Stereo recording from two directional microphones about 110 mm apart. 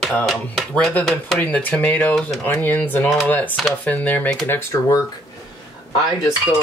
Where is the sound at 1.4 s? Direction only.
15° left (ahead or behind).